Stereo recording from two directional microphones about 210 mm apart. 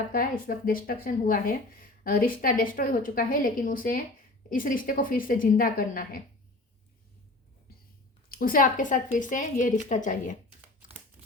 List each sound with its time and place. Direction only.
0.1 s a woman's voice: 45° left (ahead or behind)
8.3 s a woman's voice: 45° left (ahead or behind)